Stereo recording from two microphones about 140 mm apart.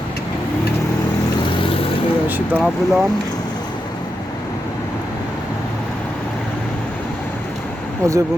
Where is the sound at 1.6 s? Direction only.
40° left (ahead or behind).